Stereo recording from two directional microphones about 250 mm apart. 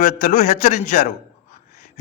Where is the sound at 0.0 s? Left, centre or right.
Left.